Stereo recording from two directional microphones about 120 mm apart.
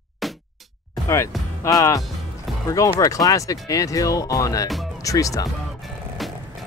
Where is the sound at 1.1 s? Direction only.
25° left (ahead or behind).